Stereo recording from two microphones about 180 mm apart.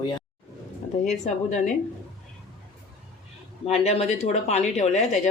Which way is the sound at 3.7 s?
35° left (ahead or behind).